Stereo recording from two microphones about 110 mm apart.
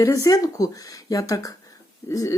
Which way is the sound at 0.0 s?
30° left (ahead or behind).